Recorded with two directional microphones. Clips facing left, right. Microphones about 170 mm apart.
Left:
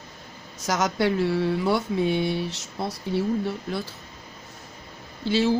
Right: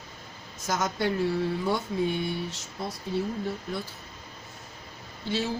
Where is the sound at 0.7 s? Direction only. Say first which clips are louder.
Left 4 dB; 80° left.